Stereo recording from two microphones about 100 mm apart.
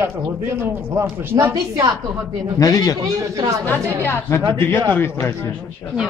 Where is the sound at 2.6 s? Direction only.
40° left (ahead or behind).